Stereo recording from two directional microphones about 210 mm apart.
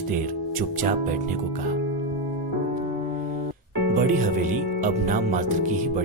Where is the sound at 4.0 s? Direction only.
40° right (ahead or behind).